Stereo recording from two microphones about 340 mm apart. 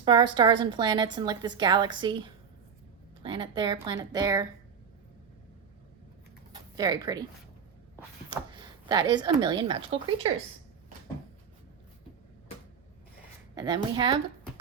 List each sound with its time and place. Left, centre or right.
0.0 s a woman's voice: centre
6.7 s a woman's voice: centre
7.9 s a sound: centre
13.6 s a woman's voice: centre